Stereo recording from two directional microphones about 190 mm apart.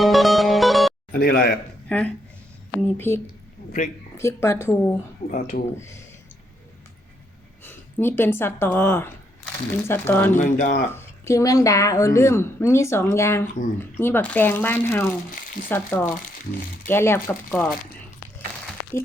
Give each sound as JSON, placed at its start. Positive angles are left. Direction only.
{"t": 0.0, "sound": "music", "side_deg": 0}
{"t": 1.1, "sound": "a man's voice", "side_deg": 50}
{"t": 1.9, "sound": "a woman's voice", "side_deg": 5}
{"t": 4.2, "sound": "a woman's voice", "side_deg": 15}
{"t": 5.3, "sound": "speech", "side_deg": 40}
{"t": 5.7, "sound": "a woman's voice", "side_deg": 15}
{"t": 7.6, "sound": "a woman's voice", "side_deg": 10}
{"t": 10.3, "sound": "speech", "side_deg": 40}
{"t": 10.9, "sound": "a woman's voice", "side_deg": 15}
{"t": 15.3, "sound": "frying", "side_deg": 45}
{"t": 15.7, "sound": "a woman's voice", "side_deg": 10}